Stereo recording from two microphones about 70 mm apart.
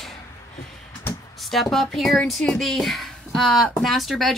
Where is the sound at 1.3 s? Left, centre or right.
Centre.